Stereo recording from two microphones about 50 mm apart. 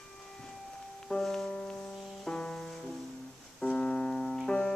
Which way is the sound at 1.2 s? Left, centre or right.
Centre.